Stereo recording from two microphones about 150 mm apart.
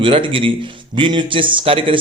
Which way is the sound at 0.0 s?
35° right (ahead or behind).